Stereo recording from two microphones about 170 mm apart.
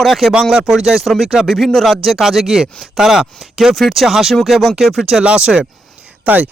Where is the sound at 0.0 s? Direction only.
Centre (ahead or behind).